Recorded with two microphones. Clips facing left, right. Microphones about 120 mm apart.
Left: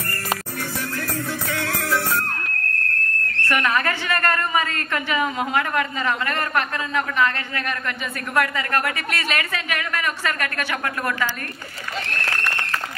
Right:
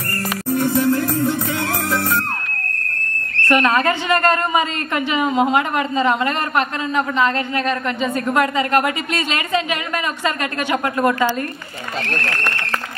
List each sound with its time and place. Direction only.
0.6 s music: 25° right (ahead or behind)
3.4 s a woman's voice: 20° right (ahead or behind)